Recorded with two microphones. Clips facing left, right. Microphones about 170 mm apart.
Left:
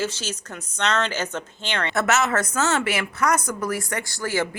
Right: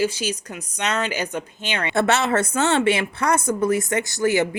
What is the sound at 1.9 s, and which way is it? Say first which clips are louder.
A woman's voice: right 3 dB; 30° right (ahead or behind).